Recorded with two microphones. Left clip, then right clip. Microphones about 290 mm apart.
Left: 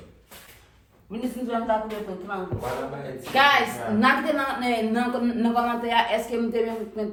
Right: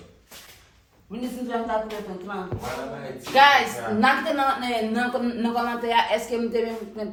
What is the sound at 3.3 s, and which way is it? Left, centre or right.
Speech, centre.